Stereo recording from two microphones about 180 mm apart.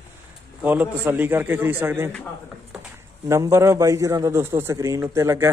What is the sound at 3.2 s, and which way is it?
A man's voice, 15° right (ahead or behind).